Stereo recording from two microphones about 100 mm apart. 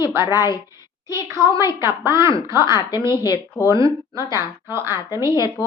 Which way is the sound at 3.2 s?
35° left (ahead or behind).